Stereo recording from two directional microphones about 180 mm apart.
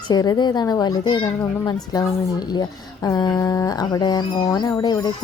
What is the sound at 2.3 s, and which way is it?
Speech, 25° left (ahead or behind).